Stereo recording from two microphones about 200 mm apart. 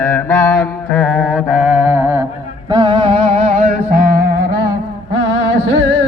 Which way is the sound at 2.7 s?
25° right (ahead or behind).